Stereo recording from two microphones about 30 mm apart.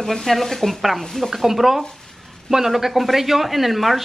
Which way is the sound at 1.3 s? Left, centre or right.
Centre.